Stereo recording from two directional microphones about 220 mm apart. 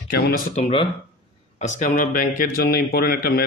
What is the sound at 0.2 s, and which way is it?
Speech, 35° left (ahead or behind).